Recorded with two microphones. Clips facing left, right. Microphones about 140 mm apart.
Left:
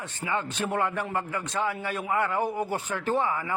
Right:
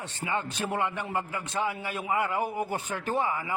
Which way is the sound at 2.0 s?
5° right (ahead or behind).